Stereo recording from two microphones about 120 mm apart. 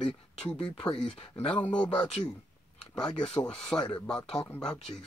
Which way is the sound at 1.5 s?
10° left (ahead or behind).